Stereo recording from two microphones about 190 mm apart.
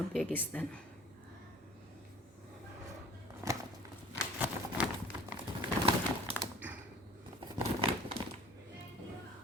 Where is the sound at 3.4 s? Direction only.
15° right (ahead or behind).